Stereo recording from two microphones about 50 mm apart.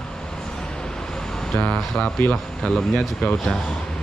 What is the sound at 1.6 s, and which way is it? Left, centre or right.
Speech, left.